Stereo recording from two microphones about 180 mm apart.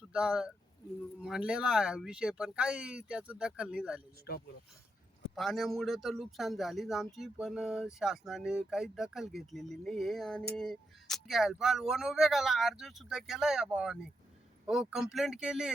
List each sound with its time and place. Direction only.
0.1 s a man's voice: 5° right (ahead or behind)
4.3 s speech: 60° left (ahead or behind)
5.3 s a man's voice: centre (ahead or behind)